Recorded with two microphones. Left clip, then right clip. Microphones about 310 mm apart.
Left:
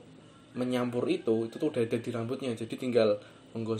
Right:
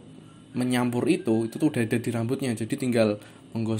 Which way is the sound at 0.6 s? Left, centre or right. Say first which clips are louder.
Right 4 dB; right.